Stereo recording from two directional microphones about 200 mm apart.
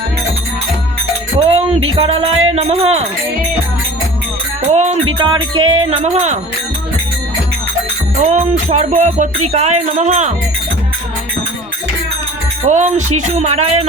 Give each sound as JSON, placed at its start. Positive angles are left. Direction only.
{"t": 1.4, "sound": "music", "side_deg": -30}
{"t": 2.0, "sound": "speech", "side_deg": -30}
{"t": 4.7, "sound": "music", "side_deg": -35}
{"t": 5.1, "sound": "speech", "side_deg": -25}
{"t": 8.2, "sound": "music", "side_deg": -35}
{"t": 12.6, "sound": "music", "side_deg": -35}